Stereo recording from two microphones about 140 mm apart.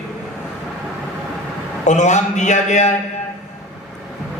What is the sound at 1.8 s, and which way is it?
A man's voice, 60° left (ahead or behind).